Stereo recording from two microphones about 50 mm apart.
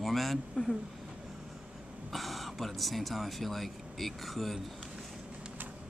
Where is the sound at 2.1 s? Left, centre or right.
Centre.